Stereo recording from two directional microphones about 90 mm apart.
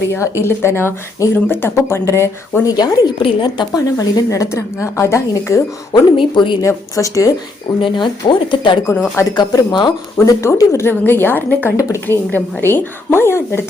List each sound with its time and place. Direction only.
0.1 s speech: 30° left (ahead or behind)
2.6 s speech: 45° left (ahead or behind)
3.2 s speech: 65° left (ahead or behind)
3.8 s a woman's voice: 35° left (ahead or behind)
5.9 s speech: 65° left (ahead or behind)
6.6 s a woman's voice: 35° left (ahead or behind)
7.8 s speech: 65° left (ahead or behind)
9.3 s speech: 50° left (ahead or behind)
10.2 s speech: 35° left (ahead or behind)